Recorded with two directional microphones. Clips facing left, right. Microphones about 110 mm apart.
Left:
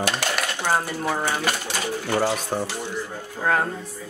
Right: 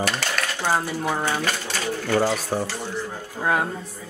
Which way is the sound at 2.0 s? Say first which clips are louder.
Right 2 dB; 10° left (ahead or behind).